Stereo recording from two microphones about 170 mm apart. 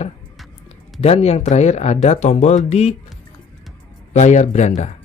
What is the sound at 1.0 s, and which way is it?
Speech, 35° left (ahead or behind).